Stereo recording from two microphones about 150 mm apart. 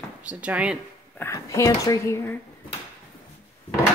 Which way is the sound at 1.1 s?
15° left (ahead or behind).